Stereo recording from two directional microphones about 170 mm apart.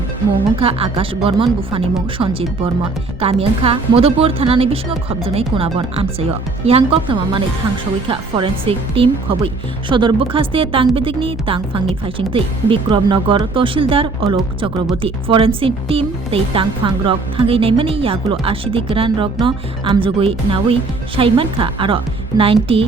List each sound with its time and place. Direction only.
0.6 s speech: 35° right (ahead or behind)